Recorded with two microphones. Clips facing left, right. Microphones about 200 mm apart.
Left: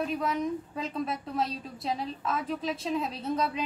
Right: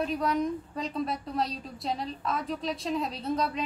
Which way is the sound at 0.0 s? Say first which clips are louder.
Right 2 dB; centre (ahead or behind).